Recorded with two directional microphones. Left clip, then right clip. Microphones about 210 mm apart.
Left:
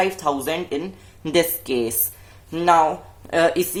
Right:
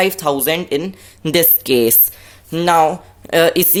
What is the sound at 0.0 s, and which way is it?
Speech, 40° right (ahead or behind).